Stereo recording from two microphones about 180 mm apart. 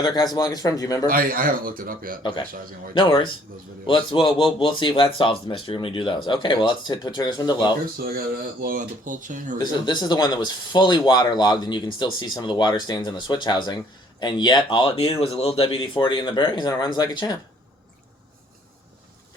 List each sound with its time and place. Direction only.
0.0 s speech: 25° left (ahead or behind)
1.0 s speech: 50° right (ahead or behind)
3.0 s speech: 30° left (ahead or behind)
8.6 s speech: 45° right (ahead or behind)
9.8 s speech: 25° left (ahead or behind)